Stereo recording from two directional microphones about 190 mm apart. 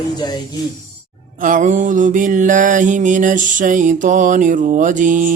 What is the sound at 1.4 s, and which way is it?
Music, 40° right (ahead or behind).